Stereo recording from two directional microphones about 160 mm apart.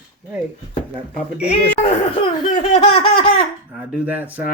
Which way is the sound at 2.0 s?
40° left (ahead or behind).